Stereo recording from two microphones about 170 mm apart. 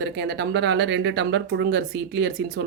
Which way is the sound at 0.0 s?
75° right (ahead or behind).